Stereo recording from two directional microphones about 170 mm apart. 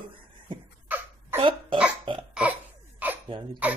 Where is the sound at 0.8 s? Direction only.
10° right (ahead or behind).